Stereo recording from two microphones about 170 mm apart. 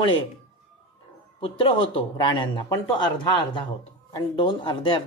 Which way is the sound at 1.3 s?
30° left (ahead or behind).